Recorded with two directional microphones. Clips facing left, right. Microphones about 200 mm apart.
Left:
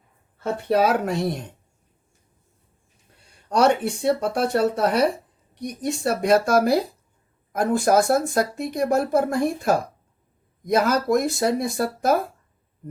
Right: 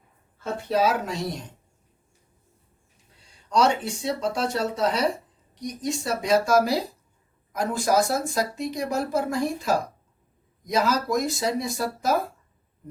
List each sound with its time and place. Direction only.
0.3 s speech: 60° left (ahead or behind)
3.2 s speech: 60° left (ahead or behind)